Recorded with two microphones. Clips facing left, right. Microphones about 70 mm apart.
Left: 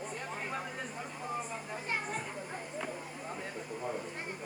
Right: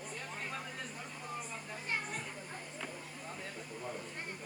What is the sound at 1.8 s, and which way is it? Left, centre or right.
Children playing, centre.